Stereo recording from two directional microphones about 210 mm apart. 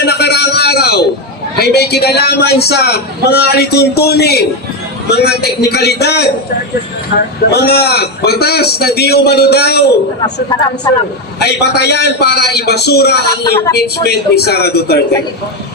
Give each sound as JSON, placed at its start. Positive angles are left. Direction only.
{"t": 0.0, "sound": "a sound", "side_deg": 50}
{"t": 1.6, "sound": "a man's voice", "side_deg": 50}
{"t": 7.5, "sound": "a man's voice", "side_deg": 50}
{"t": 11.3, "sound": "a man's voice", "side_deg": 50}
{"t": 13.4, "sound": "speech", "side_deg": 15}
{"t": 13.7, "sound": "a man's voice", "side_deg": 50}